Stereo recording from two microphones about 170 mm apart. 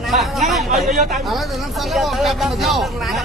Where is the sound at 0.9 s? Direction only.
50° right (ahead or behind).